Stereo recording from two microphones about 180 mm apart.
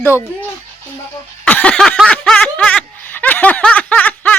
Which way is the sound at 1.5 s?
5° left (ahead or behind).